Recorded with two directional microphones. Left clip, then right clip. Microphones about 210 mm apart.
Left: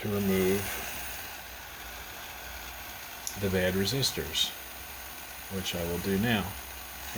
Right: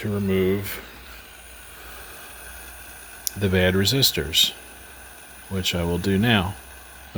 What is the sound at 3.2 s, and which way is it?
Speech, 60° right (ahead or behind).